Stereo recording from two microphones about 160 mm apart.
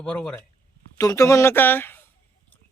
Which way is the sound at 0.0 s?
5° left (ahead or behind).